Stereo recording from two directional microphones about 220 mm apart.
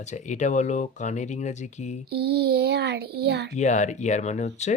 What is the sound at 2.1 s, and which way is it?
A child's voice, 50° right (ahead or behind).